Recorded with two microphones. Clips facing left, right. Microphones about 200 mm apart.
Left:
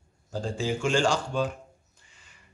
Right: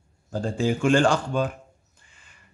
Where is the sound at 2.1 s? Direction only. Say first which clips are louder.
Right 1 dB; 55° right (ahead or behind).